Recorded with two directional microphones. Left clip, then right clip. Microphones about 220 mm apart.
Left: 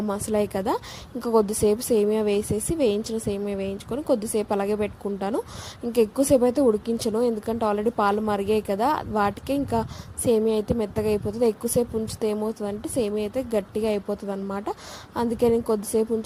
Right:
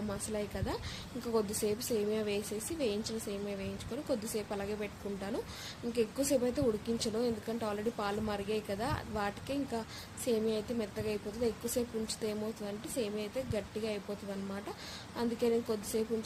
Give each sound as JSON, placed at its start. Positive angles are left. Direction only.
{"t": 0.1, "sound": "a woman's voice", "side_deg": 35}